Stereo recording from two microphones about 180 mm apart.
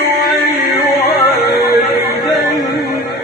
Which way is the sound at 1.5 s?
60° left (ahead or behind).